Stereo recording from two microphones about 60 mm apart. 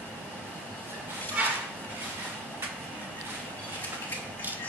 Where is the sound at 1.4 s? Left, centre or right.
Right.